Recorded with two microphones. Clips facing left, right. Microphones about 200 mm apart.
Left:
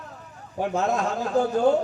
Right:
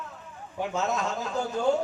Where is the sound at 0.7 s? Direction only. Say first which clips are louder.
Left 4 dB; 55° left (ahead or behind).